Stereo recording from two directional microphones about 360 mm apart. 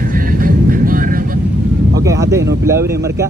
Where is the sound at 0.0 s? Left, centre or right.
Right.